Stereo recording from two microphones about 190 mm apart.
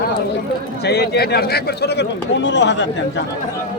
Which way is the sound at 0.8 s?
60° left (ahead or behind).